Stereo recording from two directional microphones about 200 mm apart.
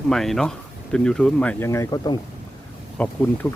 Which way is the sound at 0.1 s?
Centre (ahead or behind).